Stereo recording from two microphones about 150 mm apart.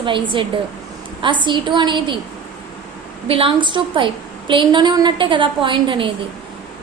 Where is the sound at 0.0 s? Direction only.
35° right (ahead or behind).